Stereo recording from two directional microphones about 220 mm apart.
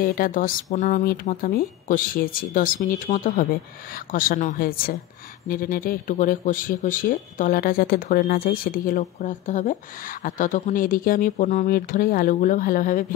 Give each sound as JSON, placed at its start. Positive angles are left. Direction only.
{"t": 0.0, "sound": "speech", "side_deg": 40}